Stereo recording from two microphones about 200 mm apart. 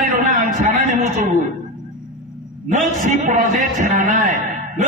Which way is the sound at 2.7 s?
40° right (ahead or behind).